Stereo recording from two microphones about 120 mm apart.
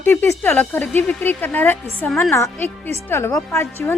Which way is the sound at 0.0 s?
20° left (ahead or behind).